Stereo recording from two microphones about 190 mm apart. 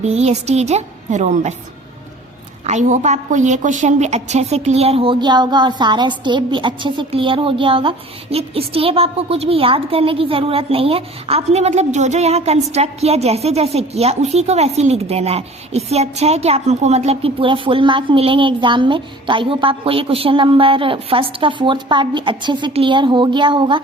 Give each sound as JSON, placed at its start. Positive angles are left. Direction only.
{"t": 0.0, "sound": "a woman's voice", "side_deg": -35}
{"t": 2.6, "sound": "a woman's voice", "side_deg": -40}